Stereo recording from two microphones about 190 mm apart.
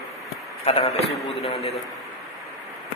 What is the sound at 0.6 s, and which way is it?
Speech, 30° left (ahead or behind).